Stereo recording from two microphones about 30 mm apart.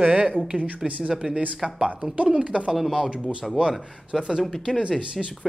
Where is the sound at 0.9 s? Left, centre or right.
Right.